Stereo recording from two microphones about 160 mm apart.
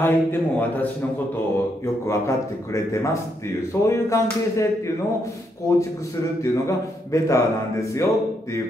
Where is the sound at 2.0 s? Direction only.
20° left (ahead or behind).